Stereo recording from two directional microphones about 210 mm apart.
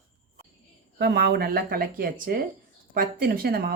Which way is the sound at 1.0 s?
50° right (ahead or behind).